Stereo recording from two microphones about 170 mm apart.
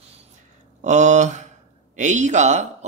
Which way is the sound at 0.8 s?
45° right (ahead or behind).